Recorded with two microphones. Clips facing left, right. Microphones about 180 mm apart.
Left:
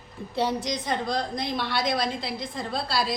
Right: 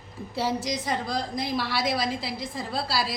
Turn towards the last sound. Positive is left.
turn(degrees=-5)  # may be behind; listen again after turning